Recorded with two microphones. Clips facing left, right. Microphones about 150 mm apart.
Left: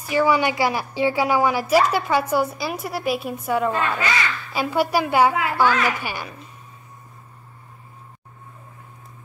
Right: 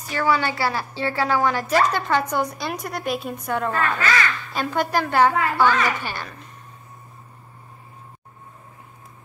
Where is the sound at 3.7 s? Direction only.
20° left (ahead or behind).